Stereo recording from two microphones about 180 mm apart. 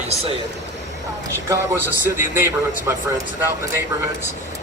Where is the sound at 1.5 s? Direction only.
10° right (ahead or behind).